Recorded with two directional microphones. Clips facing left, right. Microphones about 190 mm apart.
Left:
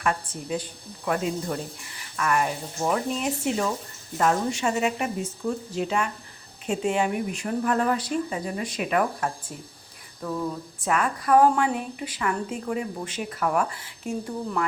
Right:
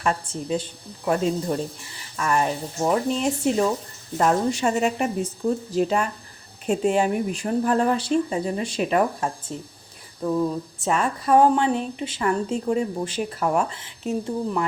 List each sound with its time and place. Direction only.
0.0 s a woman's voice: 30° right (ahead or behind)
10.8 s a woman's voice: 25° right (ahead or behind)